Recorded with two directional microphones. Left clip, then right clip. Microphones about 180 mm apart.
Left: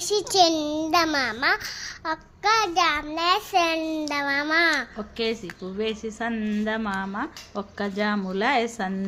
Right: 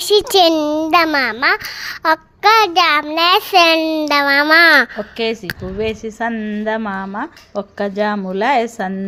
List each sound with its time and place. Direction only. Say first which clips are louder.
0.1 s child singing: right 9 dB; 40° right (ahead or behind)
2.0 s child singing: right 11 dB; 45° right (ahead or behind)